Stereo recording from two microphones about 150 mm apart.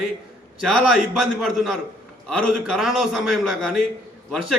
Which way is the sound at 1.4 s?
Centre (ahead or behind).